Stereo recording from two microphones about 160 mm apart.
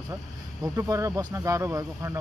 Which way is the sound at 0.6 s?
20° right (ahead or behind).